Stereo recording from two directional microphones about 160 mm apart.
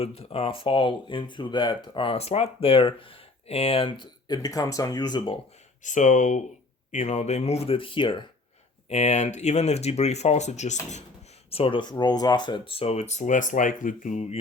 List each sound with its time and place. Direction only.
0.0 s speech: 35° left (ahead or behind)
5.8 s speech: 50° left (ahead or behind); by 8.2 s 30° left (ahead or behind)
8.9 s speech: 45° left (ahead or behind)
11.5 s speech: 35° left (ahead or behind); by 14.3 s 50° left (ahead or behind)